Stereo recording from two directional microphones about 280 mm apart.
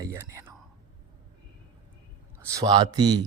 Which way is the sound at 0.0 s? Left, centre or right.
Centre.